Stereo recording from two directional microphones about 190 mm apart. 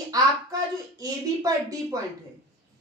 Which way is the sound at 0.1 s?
20° right (ahead or behind).